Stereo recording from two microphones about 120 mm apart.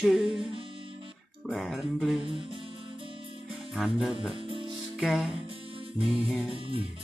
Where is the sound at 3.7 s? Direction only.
5° right (ahead or behind).